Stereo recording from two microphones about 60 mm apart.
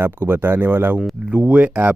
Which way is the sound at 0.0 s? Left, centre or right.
Right.